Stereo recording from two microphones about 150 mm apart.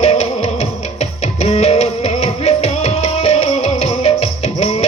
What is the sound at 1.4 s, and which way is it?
Music, 45° left (ahead or behind).